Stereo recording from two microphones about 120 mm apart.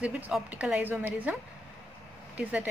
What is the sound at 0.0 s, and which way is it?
A woman's voice, 10° right (ahead or behind).